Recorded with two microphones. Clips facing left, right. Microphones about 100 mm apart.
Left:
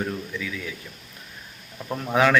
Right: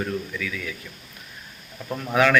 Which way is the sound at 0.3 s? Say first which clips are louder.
Right 1 dB; 25° left (ahead or behind).